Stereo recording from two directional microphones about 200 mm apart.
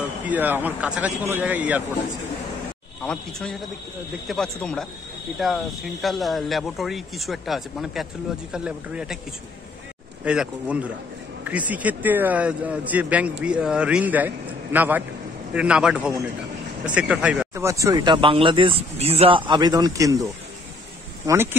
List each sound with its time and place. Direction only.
0.2 s a man's voice: 10° right (ahead or behind)
3.0 s speech: 5° left (ahead or behind)
10.2 s a man's voice: 5° right (ahead or behind)